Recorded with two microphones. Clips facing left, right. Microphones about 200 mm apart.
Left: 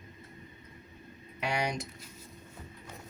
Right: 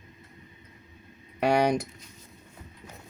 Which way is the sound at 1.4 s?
60° right (ahead or behind).